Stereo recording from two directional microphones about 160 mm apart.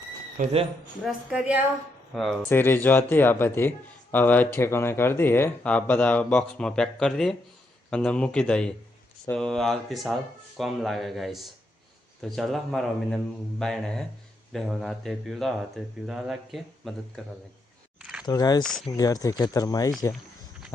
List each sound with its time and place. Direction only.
0.4 s speech: 55° right (ahead or behind)
1.0 s a woman's voice: 10° right (ahead or behind)
2.4 s speech: 15° left (ahead or behind)
18.0 s a sound: 5° right (ahead or behind)
18.3 s speech: 25° left (ahead or behind)
18.6 s speech: 5° left (ahead or behind)
18.9 s speech: 20° left (ahead or behind)